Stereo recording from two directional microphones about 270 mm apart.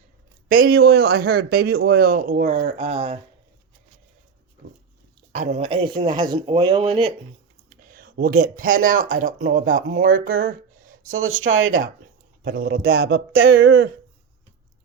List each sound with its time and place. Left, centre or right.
0.5 s a man's voice: right
5.3 s speech: right
7.7 s speech: right
11.3 s speech: right
12.4 s a man's voice: right